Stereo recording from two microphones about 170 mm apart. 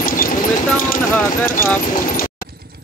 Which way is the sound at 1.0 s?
15° left (ahead or behind).